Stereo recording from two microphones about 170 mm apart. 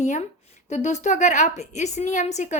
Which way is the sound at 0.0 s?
45° left (ahead or behind).